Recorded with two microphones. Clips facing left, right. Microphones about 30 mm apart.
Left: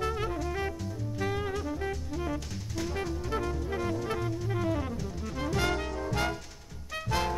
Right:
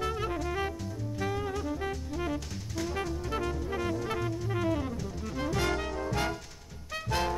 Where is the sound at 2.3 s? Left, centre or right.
Centre.